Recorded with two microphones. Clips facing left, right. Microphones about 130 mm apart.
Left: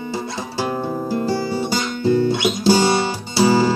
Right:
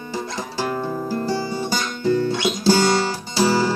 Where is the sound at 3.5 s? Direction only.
15° left (ahead or behind).